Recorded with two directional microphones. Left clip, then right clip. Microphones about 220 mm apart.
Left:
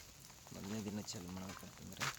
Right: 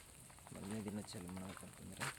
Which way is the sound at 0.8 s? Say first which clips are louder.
Left 3 dB; 10° left (ahead or behind).